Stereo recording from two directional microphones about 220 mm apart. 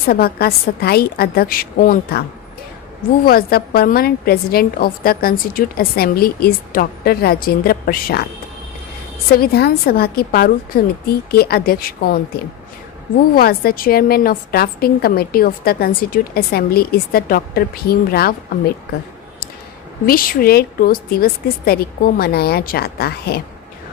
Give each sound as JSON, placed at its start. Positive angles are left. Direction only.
{"t": 0.1, "sound": "a woman's voice", "side_deg": 45}
{"t": 3.2, "sound": "a woman's voice", "side_deg": 40}
{"t": 9.3, "sound": "a woman's voice", "side_deg": 45}
{"t": 13.3, "sound": "a woman's voice", "side_deg": 45}
{"t": 20.1, "sound": "a woman's voice", "side_deg": 40}